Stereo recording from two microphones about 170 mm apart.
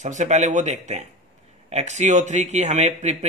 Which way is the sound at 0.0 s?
45° right (ahead or behind).